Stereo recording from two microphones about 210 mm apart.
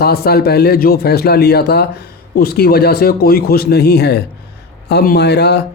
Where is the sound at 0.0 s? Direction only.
50° left (ahead or behind).